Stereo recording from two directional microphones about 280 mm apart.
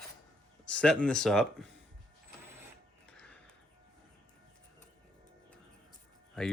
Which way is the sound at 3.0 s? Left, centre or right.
Centre.